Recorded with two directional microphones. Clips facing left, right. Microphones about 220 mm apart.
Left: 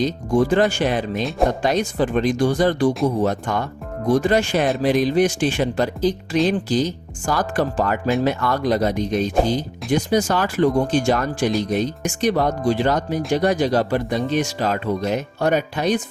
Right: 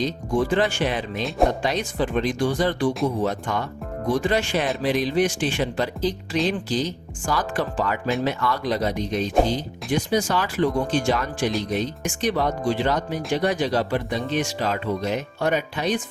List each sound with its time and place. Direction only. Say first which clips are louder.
0.4 s speech: left 3 dB; 40° left (ahead or behind)